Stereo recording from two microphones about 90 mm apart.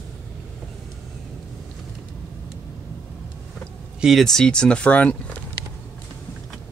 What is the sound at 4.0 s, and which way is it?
Speech, centre (ahead or behind).